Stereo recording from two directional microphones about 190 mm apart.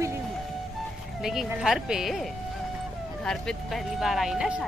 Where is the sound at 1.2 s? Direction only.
Centre (ahead or behind).